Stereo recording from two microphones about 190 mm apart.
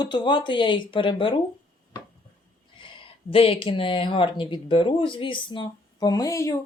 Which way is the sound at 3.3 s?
30° left (ahead or behind).